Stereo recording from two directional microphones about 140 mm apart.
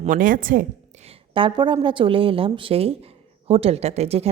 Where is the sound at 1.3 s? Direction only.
35° right (ahead or behind).